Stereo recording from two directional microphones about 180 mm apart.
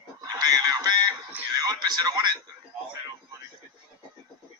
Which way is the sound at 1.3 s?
15° right (ahead or behind).